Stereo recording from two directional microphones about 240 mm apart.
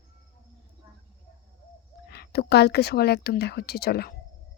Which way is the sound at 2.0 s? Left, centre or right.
Left.